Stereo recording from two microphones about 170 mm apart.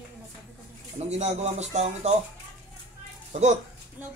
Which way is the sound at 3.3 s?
45° right (ahead or behind).